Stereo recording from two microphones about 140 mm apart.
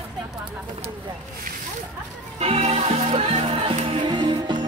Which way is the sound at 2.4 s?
45° right (ahead or behind).